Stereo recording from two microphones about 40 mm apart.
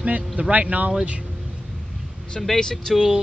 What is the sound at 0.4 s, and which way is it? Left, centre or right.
Speech, right.